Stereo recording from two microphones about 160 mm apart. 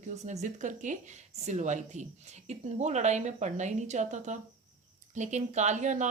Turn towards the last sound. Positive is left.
turn(degrees=-50)  # may be behind; listen again after turning